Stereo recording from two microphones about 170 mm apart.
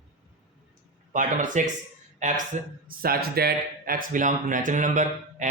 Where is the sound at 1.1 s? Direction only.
50° right (ahead or behind).